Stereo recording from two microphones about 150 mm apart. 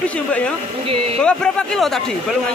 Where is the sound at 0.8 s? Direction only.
40° right (ahead or behind).